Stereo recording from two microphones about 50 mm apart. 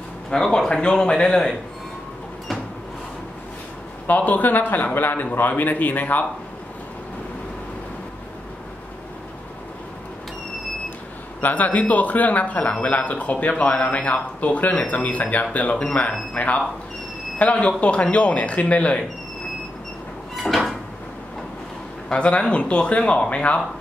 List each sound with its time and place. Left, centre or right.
0.3 s speech: centre
4.1 s speech: left
11.4 s speech: left
15.7 s speech: centre
20.4 s cupboard open or close: centre
22.1 s speech: left